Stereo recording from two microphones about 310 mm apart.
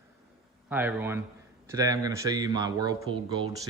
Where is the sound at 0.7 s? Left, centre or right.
Centre.